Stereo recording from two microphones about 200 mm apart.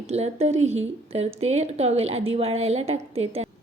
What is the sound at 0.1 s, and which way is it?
A woman's voice, 30° right (ahead or behind).